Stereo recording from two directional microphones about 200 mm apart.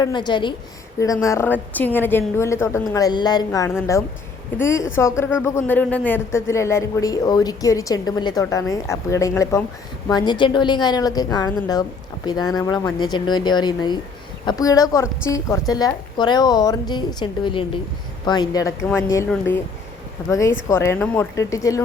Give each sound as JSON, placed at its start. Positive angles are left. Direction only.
{"t": 0.0, "sound": "speech", "side_deg": 20}
{"t": 20.3, "sound": "speech", "side_deg": 15}